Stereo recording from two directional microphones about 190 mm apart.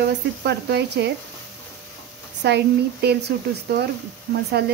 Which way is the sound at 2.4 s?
60° right (ahead or behind).